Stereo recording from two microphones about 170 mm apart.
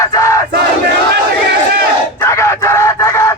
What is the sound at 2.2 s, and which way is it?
Chicken, 15° left (ahead or behind).